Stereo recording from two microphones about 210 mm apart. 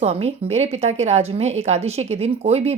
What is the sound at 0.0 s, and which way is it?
A woman's voice, 30° right (ahead or behind).